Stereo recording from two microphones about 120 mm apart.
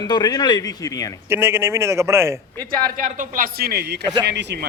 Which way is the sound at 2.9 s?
90° right.